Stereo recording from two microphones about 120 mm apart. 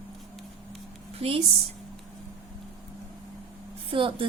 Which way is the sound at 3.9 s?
50° right (ahead or behind).